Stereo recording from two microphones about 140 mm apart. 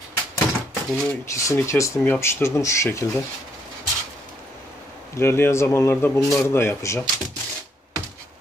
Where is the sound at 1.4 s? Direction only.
20° left (ahead or behind).